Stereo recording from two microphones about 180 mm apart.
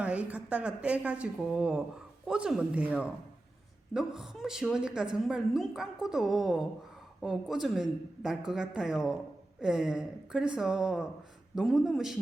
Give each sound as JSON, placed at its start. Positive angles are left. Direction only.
{"t": 0.0, "sound": "a woman's voice", "side_deg": -5}